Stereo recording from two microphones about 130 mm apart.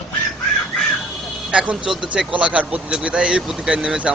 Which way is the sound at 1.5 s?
5° right (ahead or behind).